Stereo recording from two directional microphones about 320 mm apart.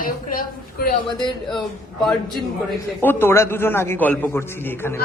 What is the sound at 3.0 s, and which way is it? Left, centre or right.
A man's voice, centre.